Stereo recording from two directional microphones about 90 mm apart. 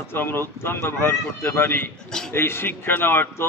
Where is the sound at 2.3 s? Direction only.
25° left (ahead or behind).